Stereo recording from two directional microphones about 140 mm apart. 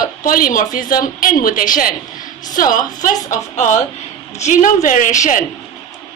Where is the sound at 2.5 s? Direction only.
70° left (ahead or behind).